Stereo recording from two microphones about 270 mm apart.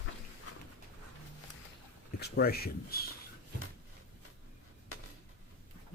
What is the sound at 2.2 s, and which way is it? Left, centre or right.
Speech, left.